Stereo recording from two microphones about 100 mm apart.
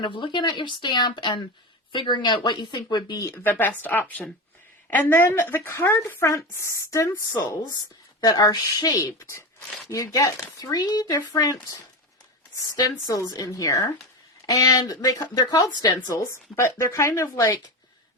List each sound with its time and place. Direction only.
0.0 s speech: 55° left (ahead or behind)
3.3 s a woman's voice: 20° left (ahead or behind)
8.2 s speech: 40° left (ahead or behind)
12.5 s speech: 35° left (ahead or behind)
16.0 s speech: 30° left (ahead or behind)